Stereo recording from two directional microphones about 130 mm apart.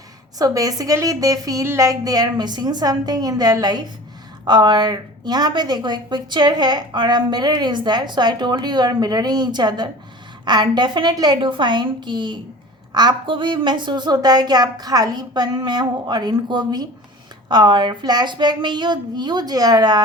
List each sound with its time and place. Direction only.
0.3 s a woman's voice: 25° right (ahead or behind)